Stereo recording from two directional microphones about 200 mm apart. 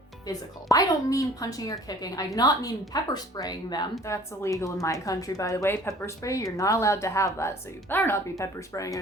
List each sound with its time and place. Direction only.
0.3 s a woman's voice: 15° left (ahead or behind)